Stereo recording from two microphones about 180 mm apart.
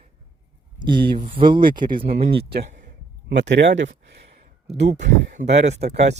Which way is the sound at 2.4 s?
65° right (ahead or behind).